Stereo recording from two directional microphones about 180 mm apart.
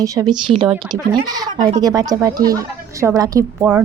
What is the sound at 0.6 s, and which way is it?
Speech, 5° right (ahead or behind).